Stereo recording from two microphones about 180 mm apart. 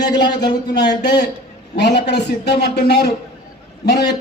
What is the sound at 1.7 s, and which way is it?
A man's voice, 70° left (ahead or behind).